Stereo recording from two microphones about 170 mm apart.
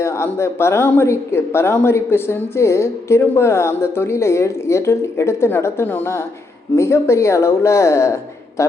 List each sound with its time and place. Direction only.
0.0 s a man's voice: 15° left (ahead or behind)